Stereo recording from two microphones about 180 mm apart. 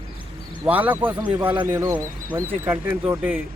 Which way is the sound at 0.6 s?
10° right (ahead or behind).